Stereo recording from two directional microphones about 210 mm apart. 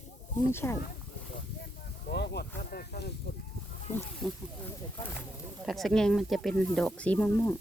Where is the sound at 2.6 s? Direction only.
45° left (ahead or behind).